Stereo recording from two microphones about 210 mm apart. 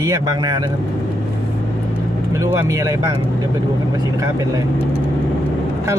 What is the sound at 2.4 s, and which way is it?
Speech, 15° right (ahead or behind).